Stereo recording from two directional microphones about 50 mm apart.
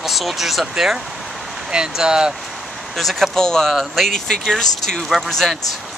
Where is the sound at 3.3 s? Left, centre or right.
Centre.